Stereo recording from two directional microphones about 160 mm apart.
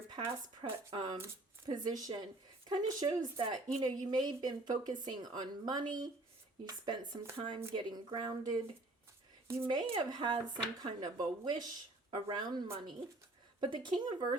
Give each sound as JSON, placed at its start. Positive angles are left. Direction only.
{"t": 0.6, "sound": "speech", "side_deg": -30}
{"t": 9.6, "sound": "speech", "side_deg": -30}